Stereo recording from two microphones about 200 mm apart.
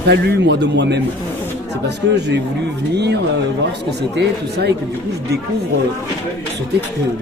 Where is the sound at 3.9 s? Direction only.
55° right (ahead or behind).